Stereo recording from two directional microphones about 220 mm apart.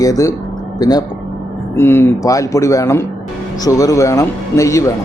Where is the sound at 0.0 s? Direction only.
15° left (ahead or behind).